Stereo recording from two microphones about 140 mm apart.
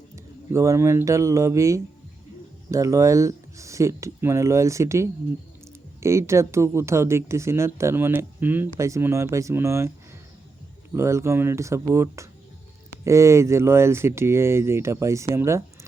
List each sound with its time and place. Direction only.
0.5 s speech: 20° right (ahead or behind)
10.9 s speech: 20° right (ahead or behind)
15.4 s a sound: 20° right (ahead or behind)